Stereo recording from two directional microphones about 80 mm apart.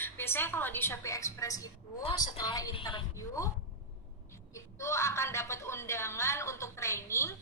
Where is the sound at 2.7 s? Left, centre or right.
Left.